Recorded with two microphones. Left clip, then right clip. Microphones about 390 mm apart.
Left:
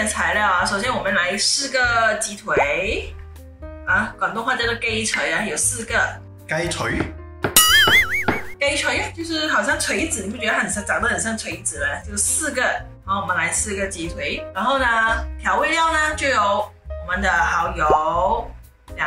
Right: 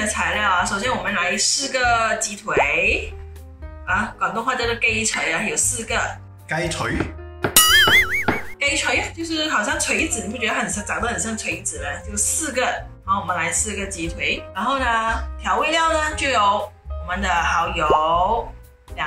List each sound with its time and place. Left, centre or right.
0.1 s speech: centre